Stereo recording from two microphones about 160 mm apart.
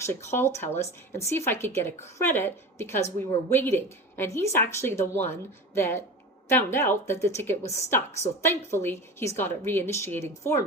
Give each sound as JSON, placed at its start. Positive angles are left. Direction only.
{"t": 0.0, "sound": "a woman's voice", "side_deg": 15}